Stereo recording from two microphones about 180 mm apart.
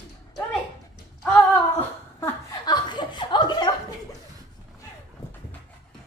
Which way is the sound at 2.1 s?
25° left (ahead or behind).